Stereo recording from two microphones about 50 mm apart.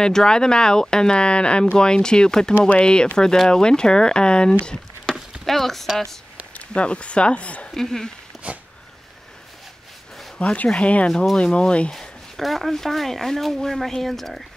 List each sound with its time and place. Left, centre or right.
0.0 s speech: centre
5.1 s a sound: centre
6.7 s speech: left
7.7 s speech: centre
8.4 s dog: right
10.5 s speech: left
11.9 s speech: centre